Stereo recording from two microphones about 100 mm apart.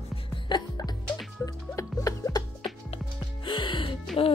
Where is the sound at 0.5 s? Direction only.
40° left (ahead or behind).